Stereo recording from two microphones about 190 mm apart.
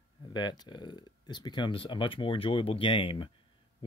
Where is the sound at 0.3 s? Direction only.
20° left (ahead or behind).